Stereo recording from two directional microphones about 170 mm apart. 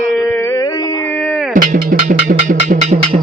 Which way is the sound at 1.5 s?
50° right (ahead or behind).